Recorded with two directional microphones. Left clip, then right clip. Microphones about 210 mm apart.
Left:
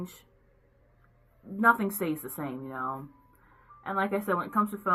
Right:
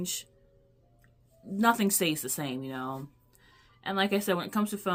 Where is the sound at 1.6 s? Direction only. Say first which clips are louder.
Left 2 dB; 55° right (ahead or behind).